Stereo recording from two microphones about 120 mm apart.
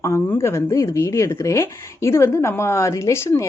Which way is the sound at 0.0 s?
25° left (ahead or behind).